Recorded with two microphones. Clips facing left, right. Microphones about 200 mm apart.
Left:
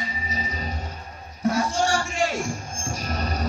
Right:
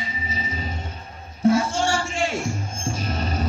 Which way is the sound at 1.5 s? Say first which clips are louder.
Left 1 dB; 25° right (ahead or behind).